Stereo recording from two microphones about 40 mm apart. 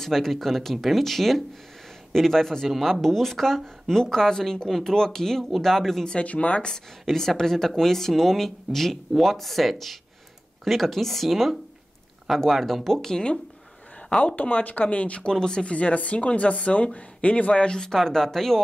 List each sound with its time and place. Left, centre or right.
0.0 s speech: centre
4.6 s speech: centre
4.9 s speech: centre
6.0 s a woman's voice: left
7.1 s speech: centre
14.2 s a woman's voice: left
15.3 s speech: centre
15.6 s a woman's voice: left; by 18.6 s centre